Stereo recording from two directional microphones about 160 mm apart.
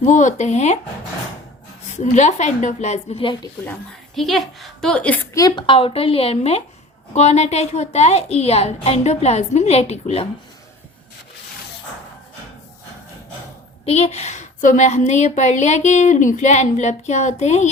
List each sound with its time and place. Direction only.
0.0 s a woman's voice: 50° left (ahead or behind)
1.9 s a woman's voice: 45° left (ahead or behind)
3.7 s a woman's voice: centre (ahead or behind)
5.3 s a woman's voice: 20° left (ahead or behind); by 10.2 s 40° left (ahead or behind)
13.8 s a woman's voice: 40° left (ahead or behind)